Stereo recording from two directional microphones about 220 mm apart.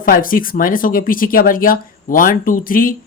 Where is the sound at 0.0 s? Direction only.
40° left (ahead or behind).